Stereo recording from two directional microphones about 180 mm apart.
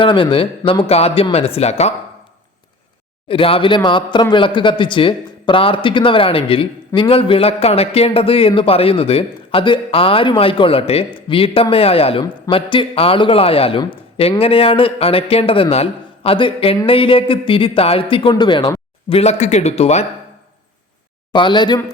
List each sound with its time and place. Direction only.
0.0 s speech: 30° left (ahead or behind)
3.2 s speech: 30° left (ahead or behind)
21.3 s speech: 25° left (ahead or behind)